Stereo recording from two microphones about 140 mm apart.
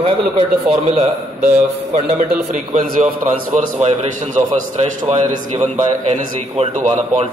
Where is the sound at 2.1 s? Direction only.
70° right (ahead or behind).